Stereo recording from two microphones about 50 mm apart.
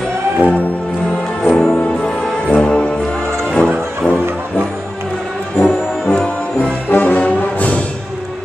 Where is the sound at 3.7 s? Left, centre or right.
Right.